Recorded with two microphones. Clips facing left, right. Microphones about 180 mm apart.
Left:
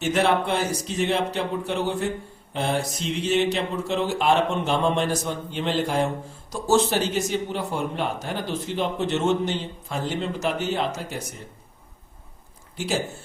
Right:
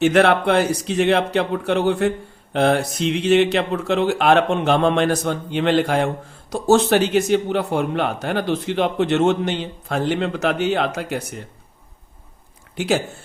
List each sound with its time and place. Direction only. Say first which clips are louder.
0.0 s speech: right 6 dB; 70° right (ahead or behind)
12.7 s a man's voice: right 7 dB; 65° right (ahead or behind)